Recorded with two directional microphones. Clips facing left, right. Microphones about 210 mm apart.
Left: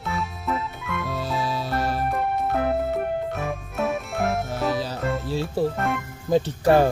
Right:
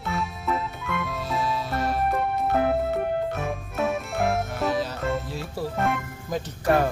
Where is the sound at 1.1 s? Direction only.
35° left (ahead or behind).